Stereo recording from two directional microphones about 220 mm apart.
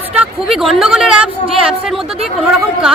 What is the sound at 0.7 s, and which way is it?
Speech, 5° right (ahead or behind).